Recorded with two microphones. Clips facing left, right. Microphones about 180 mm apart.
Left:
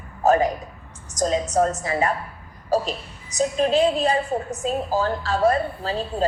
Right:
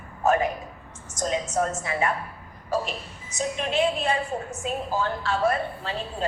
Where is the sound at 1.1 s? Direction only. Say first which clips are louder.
Left 5 dB; 35° left (ahead or behind).